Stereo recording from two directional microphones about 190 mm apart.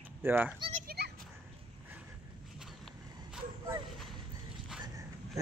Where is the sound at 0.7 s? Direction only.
50° right (ahead or behind).